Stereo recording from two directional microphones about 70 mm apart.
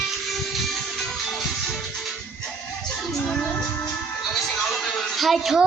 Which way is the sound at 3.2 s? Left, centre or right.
Centre.